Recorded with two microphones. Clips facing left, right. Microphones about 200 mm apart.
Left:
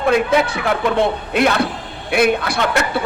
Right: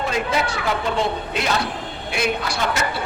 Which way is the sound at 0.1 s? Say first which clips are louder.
Left 7 dB; 55° left (ahead or behind).